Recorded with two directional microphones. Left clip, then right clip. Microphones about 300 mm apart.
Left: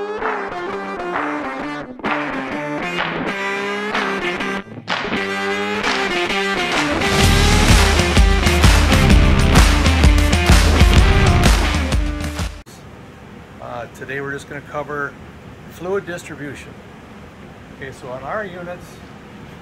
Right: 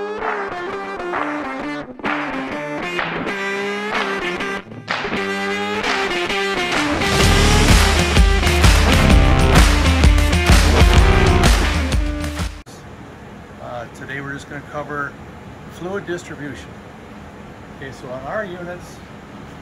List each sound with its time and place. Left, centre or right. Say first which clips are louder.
0.0 s music: left 1 dB; centre
14.1 s a sound: left 3 dB; centre
15.8 s speech: left 3 dB; centre